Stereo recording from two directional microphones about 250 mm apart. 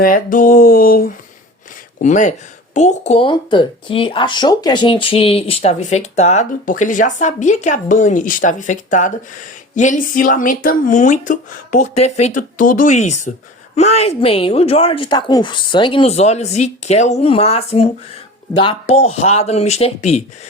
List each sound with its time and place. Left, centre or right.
0.0 s speech: left